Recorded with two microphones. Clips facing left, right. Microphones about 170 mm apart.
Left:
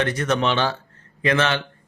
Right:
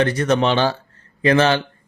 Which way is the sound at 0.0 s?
35° right (ahead or behind).